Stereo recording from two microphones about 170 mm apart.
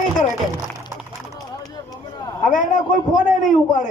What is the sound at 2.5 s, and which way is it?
A man's voice, 50° left (ahead or behind).